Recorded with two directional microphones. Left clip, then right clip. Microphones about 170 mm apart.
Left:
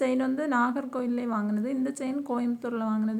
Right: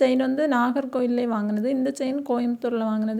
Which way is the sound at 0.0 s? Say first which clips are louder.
Right 6 dB; 30° right (ahead or behind).